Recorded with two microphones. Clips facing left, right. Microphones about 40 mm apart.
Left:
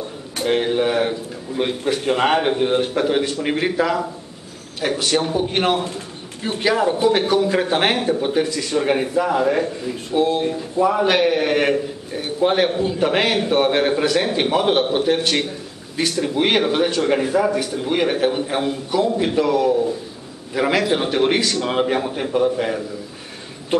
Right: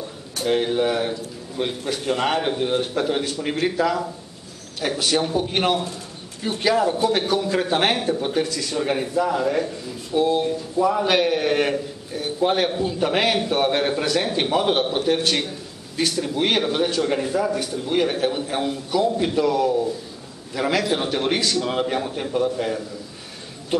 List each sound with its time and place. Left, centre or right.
0.5 s a man's voice: left